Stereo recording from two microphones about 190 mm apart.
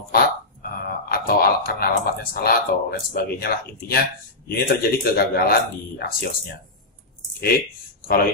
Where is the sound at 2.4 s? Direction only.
50° left (ahead or behind).